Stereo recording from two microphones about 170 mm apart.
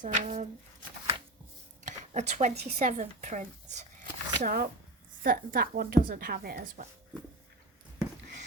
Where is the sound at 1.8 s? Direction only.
45° right (ahead or behind).